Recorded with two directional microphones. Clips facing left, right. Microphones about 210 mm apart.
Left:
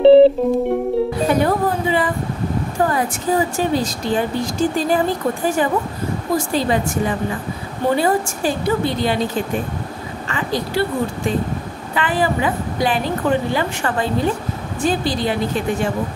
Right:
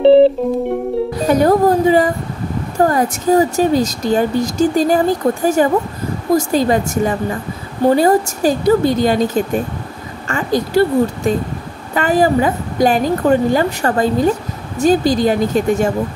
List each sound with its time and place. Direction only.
0.0 s music: centre (ahead or behind)
1.3 s a woman's voice: 40° right (ahead or behind)